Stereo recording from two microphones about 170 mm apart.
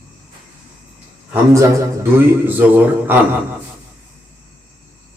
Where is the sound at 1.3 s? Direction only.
15° right (ahead or behind).